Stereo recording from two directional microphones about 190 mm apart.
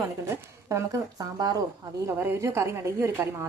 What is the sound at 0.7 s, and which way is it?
Speech, 15° right (ahead or behind).